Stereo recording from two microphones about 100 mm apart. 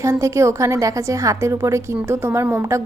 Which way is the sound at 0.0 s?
30° right (ahead or behind).